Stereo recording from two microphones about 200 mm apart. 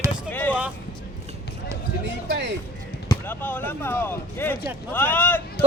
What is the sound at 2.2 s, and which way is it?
Speech, 60° right (ahead or behind).